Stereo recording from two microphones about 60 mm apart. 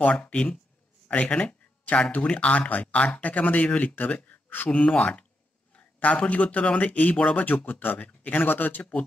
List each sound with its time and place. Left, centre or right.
0.1 s speech: centre
7.4 s speech: left